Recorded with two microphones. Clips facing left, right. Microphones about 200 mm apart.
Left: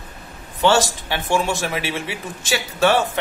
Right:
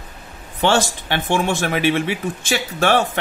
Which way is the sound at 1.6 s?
55° right (ahead or behind).